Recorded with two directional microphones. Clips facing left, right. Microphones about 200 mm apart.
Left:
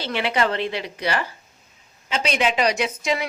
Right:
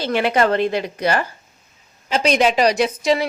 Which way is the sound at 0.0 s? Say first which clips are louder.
Right 5 dB; 45° right (ahead or behind).